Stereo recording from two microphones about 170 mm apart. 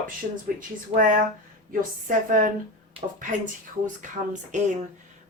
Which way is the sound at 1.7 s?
55° right (ahead or behind).